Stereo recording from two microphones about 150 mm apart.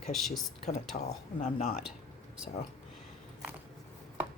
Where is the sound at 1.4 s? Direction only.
45° left (ahead or behind).